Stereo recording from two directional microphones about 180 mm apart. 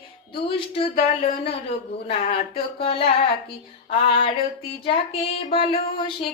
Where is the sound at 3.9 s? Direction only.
30° left (ahead or behind).